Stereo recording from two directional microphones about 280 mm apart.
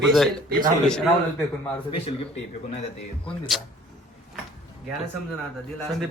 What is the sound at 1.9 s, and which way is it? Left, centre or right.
Speech, left.